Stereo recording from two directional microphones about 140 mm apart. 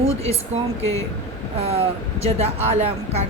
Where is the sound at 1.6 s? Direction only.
45° right (ahead or behind).